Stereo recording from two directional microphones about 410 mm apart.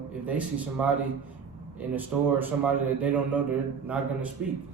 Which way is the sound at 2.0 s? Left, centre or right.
Centre.